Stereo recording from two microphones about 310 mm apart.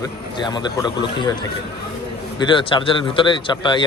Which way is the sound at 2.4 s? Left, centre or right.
Centre.